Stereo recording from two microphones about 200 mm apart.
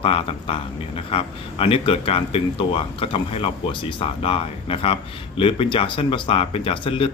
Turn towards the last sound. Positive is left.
turn(degrees=25)  # may be behind; listen again after turning